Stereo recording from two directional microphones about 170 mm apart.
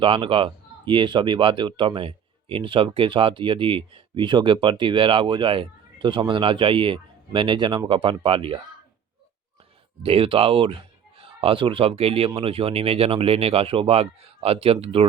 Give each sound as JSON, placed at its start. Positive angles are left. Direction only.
{"t": 0.0, "sound": "speech", "side_deg": -30}
{"t": 10.0, "sound": "speech", "side_deg": -35}